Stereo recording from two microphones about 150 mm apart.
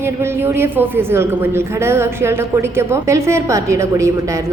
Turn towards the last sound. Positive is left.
turn(degrees=-20)  # may be behind; listen again after turning